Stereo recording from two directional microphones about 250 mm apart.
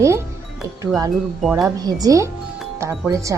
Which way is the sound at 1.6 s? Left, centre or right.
Centre.